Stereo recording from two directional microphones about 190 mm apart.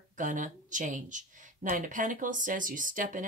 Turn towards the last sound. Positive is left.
turn(degrees=-45)  # may be behind; listen again after turning